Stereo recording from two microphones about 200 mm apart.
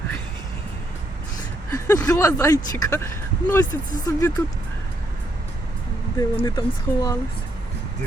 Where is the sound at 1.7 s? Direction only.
15° left (ahead or behind).